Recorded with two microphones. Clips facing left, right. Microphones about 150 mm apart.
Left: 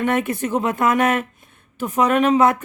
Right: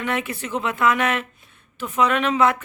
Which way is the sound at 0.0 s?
50° left (ahead or behind).